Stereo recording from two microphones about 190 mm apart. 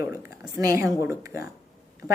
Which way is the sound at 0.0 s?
15° right (ahead or behind).